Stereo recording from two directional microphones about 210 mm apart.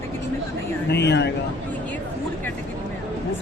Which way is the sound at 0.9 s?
55° left (ahead or behind).